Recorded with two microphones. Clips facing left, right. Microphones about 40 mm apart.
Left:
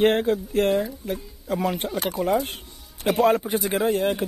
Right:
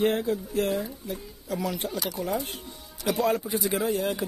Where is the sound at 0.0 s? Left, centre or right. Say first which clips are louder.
Left 5 dB; left.